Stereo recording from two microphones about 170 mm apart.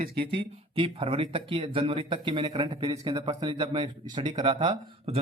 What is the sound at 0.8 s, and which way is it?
Speech, 30° right (ahead or behind).